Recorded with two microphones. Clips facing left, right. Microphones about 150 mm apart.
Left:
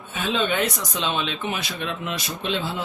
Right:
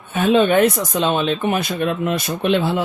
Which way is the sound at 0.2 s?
55° right (ahead or behind).